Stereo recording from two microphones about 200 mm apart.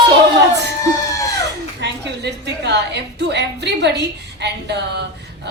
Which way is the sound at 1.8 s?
55° right (ahead or behind).